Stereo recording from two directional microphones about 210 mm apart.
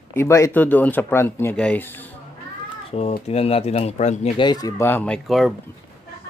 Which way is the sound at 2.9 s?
30° left (ahead or behind).